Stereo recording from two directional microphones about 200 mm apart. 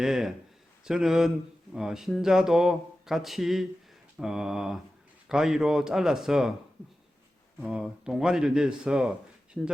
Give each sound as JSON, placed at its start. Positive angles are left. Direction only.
{"t": 0.0, "sound": "speech", "side_deg": 0}
{"t": 7.6, "sound": "speech", "side_deg": -5}